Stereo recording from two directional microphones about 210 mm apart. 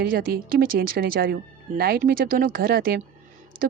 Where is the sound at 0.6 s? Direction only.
45° right (ahead or behind).